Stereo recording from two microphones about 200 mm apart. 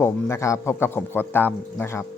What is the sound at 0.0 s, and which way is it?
Speech, 15° left (ahead or behind).